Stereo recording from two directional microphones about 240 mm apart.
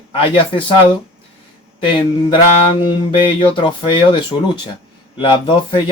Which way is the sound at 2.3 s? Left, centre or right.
Left.